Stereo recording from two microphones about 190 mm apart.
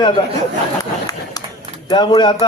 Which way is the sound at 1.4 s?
20° left (ahead or behind).